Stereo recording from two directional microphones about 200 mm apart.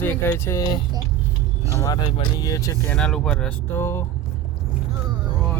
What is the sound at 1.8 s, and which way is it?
Speech, 20° left (ahead or behind).